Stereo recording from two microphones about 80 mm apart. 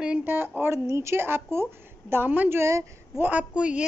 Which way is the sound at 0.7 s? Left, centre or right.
Right.